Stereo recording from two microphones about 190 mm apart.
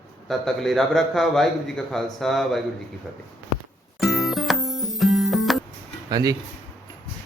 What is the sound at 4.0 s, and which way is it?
Music, centre (ahead or behind).